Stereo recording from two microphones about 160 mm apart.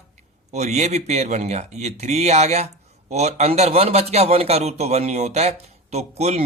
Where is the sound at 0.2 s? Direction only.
45° right (ahead or behind).